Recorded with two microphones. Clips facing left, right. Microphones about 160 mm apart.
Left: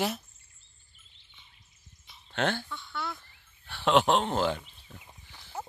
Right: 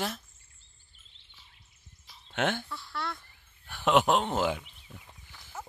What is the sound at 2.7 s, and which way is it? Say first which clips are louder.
Speech: even; 5° right (ahead or behind).